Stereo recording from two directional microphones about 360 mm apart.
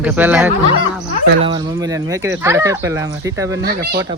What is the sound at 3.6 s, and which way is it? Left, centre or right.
Speech, right.